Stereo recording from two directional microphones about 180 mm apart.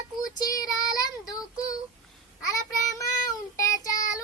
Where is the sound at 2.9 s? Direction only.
20° left (ahead or behind).